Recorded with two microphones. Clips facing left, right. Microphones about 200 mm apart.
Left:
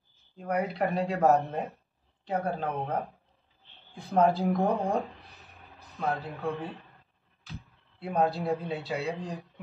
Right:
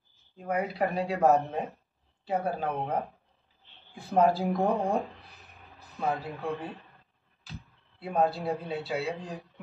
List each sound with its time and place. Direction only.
0.4 s speech: centre (ahead or behind)
4.2 s speech: centre (ahead or behind)
5.2 s a sound: 15° left (ahead or behind)
6.0 s speech: centre (ahead or behind)